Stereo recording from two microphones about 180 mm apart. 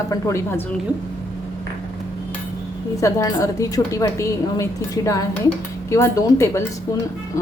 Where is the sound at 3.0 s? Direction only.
15° left (ahead or behind).